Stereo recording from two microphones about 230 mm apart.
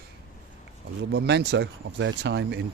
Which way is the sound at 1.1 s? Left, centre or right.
Right.